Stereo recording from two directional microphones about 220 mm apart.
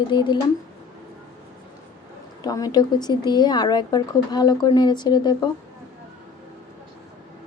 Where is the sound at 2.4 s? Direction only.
15° left (ahead or behind).